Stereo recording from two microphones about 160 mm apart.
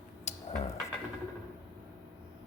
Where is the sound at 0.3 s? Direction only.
45° left (ahead or behind).